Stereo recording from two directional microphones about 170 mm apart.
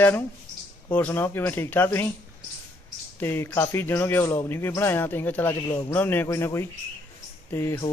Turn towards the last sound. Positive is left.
turn(degrees=15)  # may be behind; listen again after turning